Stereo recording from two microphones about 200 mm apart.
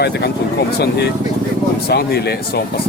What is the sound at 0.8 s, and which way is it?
Speech, 55° left (ahead or behind).